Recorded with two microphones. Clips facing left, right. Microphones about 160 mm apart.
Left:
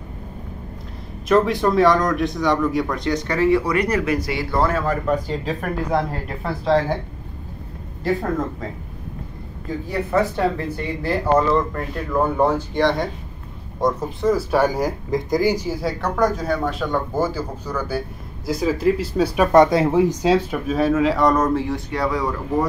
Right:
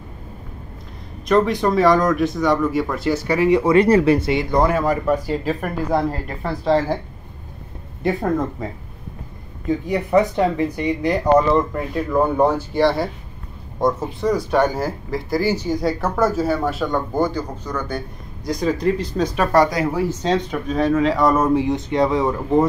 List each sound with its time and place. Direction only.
1.3 s speech: centre (ahead or behind)
9.8 s speech: 20° right (ahead or behind); by 21.5 s centre (ahead or behind)
21.5 s speech: 20° right (ahead or behind)